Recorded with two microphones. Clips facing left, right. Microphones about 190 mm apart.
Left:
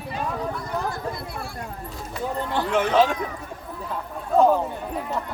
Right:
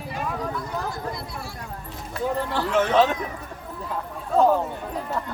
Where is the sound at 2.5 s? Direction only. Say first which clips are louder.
Left 1 dB; 15° left (ahead or behind).